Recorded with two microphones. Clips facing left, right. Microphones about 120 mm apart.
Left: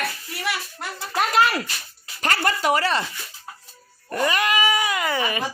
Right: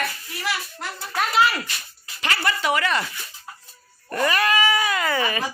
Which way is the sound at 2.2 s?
45° left (ahead or behind).